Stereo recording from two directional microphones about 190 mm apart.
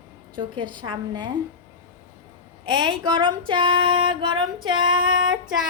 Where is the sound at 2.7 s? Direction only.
25° right (ahead or behind).